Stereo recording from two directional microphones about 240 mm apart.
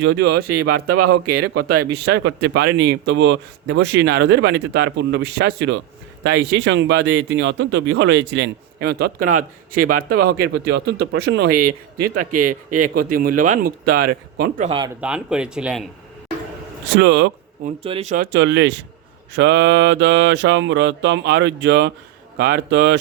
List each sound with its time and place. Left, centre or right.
0.0 s a man's voice: right
0.7 s speech: right
2.0 s a man's voice: right
15.0 s speech: centre
16.9 s a man's voice: right
17.7 s a man's voice: right